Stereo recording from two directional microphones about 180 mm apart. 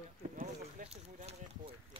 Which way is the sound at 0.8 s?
35° right (ahead or behind).